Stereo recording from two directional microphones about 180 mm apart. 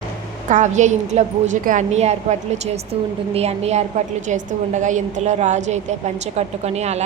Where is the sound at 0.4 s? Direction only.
45° right (ahead or behind).